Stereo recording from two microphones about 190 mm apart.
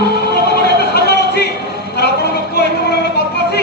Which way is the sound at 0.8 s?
55° left (ahead or behind).